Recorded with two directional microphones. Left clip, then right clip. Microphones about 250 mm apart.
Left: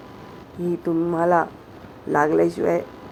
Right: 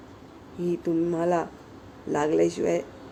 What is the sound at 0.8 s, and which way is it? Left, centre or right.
Speech, centre.